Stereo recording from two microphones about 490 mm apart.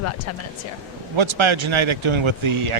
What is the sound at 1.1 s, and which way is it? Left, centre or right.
Speech, right.